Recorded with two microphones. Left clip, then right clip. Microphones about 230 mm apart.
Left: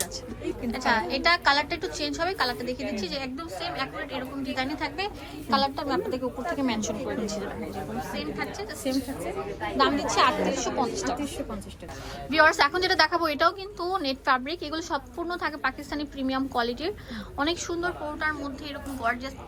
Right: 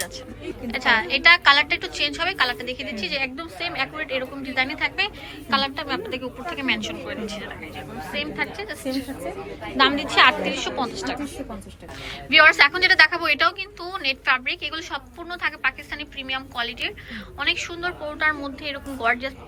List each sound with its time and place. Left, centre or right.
0.7 s a woman's voice: centre
8.1 s a woman's voice: centre
12.3 s a woman's voice: centre
18.2 s a woman's voice: centre